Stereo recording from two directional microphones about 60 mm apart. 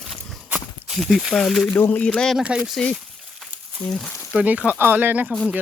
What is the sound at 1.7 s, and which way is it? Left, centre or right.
Speech, left.